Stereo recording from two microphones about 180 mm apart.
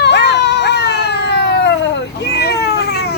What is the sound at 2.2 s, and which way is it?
Cat, 65° left (ahead or behind).